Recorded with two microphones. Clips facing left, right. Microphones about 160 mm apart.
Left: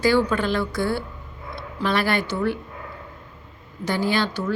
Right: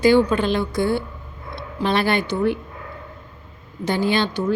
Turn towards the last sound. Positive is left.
turn(degrees=-20)  # may be behind; listen again after turning